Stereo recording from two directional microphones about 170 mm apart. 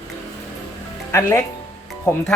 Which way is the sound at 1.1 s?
15° left (ahead or behind).